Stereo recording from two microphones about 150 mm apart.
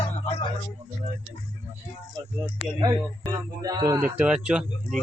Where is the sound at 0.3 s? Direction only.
40° left (ahead or behind).